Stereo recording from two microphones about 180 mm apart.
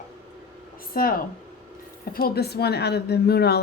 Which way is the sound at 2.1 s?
60° left (ahead or behind).